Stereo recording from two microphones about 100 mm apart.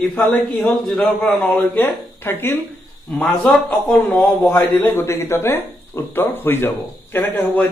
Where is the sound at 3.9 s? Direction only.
20° left (ahead or behind).